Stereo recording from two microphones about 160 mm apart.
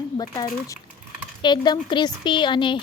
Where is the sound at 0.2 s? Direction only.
25° left (ahead or behind).